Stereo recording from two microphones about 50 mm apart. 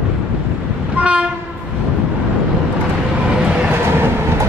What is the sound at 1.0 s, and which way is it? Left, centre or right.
Train, right.